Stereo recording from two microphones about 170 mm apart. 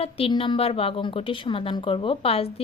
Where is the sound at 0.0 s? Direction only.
30° left (ahead or behind).